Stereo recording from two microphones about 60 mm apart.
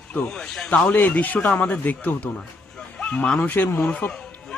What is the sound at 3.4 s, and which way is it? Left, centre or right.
Speech, left.